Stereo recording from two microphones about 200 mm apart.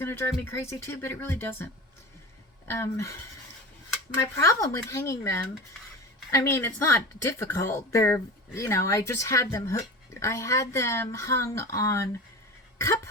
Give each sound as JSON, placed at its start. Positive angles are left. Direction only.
{"t": 0.6, "sound": "a woman's voice", "side_deg": 10}
{"t": 4.2, "sound": "a woman's voice", "side_deg": 15}